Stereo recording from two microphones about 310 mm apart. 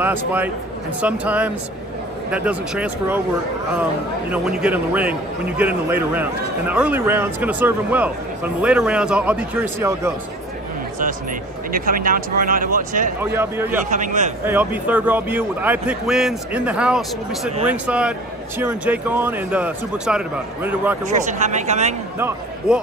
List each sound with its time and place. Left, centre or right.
1.0 s a man's voice: centre
4.3 s a man's voice: centre
11.7 s speech: right
13.2 s speech: centre
13.8 s speech: right
14.4 s a man's voice: centre
21.0 s speech: right